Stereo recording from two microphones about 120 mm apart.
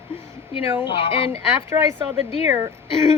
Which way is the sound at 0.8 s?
45° left (ahead or behind).